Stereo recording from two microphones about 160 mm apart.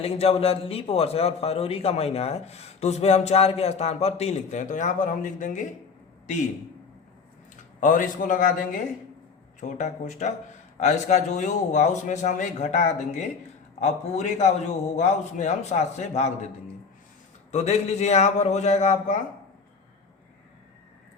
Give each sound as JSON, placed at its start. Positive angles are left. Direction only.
{"t": 0.0, "sound": "a man's voice", "side_deg": 40}
{"t": 7.8, "sound": "a man's voice", "side_deg": 55}
{"t": 9.6, "sound": "a man's voice", "side_deg": 50}
{"t": 17.5, "sound": "a man's voice", "side_deg": 45}